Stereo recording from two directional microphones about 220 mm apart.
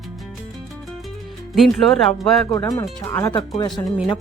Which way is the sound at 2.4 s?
15° left (ahead or behind).